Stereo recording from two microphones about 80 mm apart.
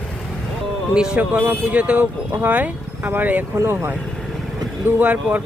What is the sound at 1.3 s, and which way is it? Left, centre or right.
Speech, right.